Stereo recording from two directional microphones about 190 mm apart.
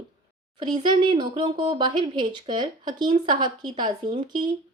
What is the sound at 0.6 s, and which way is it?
Speech, 25° right (ahead or behind).